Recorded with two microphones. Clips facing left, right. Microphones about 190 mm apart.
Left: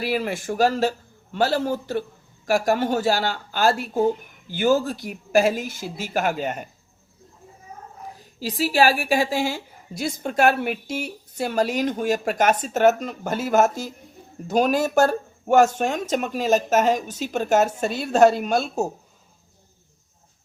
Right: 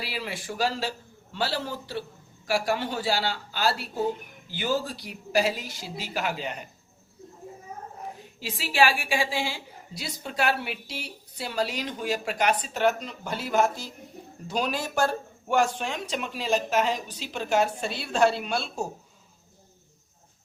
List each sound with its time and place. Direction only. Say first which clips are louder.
0.0 s a woman's voice: left 10 dB; 50° left (ahead or behind)
8.2 s a woman's voice: left 15 dB; 40° left (ahead or behind)